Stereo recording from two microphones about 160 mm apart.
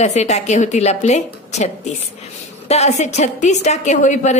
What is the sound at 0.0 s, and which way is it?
A woman's voice, 45° left (ahead or behind).